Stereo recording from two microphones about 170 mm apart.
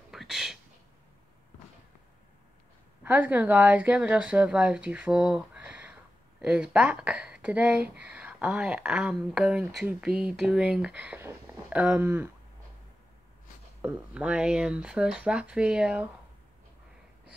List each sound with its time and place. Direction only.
0.1 s a sound: centre (ahead or behind)
3.0 s speech: 10° right (ahead or behind)
13.7 s speech: 10° right (ahead or behind)